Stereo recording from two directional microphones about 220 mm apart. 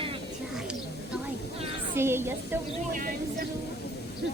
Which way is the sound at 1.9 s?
10° right (ahead or behind).